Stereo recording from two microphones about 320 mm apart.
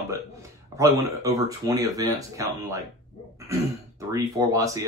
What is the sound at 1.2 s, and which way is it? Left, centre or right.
Speech, centre.